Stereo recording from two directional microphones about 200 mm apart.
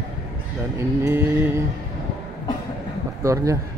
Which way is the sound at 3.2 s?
15° right (ahead or behind).